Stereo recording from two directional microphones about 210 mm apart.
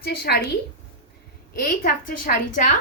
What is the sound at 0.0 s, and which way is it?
Speech, 50° left (ahead or behind).